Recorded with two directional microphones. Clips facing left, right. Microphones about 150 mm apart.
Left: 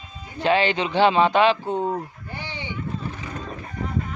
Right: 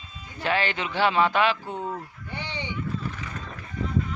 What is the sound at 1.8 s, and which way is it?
Sheep, 40° left (ahead or behind).